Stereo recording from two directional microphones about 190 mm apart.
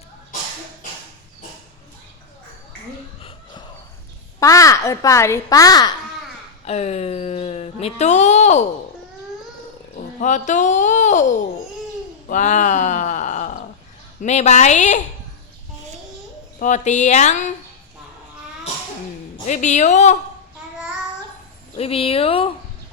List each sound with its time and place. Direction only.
3.2 s a sound: 30° left (ahead or behind)
4.4 s a child's voice: 15° left (ahead or behind)
6.7 s speech: 35° left (ahead or behind)
9.9 s speech: 40° left (ahead or behind)
12.3 s a sound: 40° left (ahead or behind)
14.2 s speech: 35° left (ahead or behind)
16.6 s speech: 40° left (ahead or behind)
19.5 s speech: 40° left (ahead or behind)
21.8 s speech: 30° left (ahead or behind)